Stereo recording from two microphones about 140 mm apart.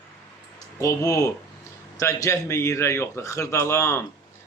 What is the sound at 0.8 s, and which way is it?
A man's voice, 20° left (ahead or behind).